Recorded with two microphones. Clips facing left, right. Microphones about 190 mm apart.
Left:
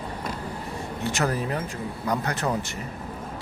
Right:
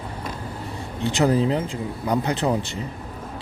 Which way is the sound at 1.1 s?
20° right (ahead or behind).